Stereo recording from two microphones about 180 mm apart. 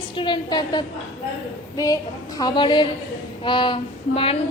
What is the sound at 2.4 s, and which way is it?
A woman's voice, 25° left (ahead or behind).